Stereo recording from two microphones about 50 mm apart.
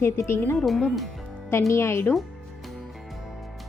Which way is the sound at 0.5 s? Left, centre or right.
Centre.